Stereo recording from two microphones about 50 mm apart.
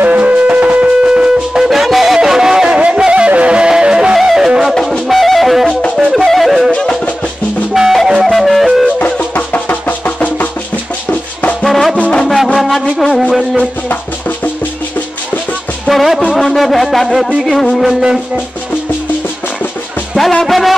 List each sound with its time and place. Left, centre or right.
0.0 s music: right; by 1.6 s centre
1.6 s music: centre
6.7 s music: left
7.7 s music: centre
9.0 s music: left
11.6 s music: centre
12.0 s music: centre
12.5 s music: centre
15.9 s music: centre
16.3 s a sound: centre
17.4 s music: centre
20.4 s music: centre